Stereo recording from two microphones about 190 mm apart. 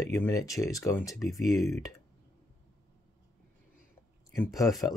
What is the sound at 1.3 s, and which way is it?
Speech, centre (ahead or behind).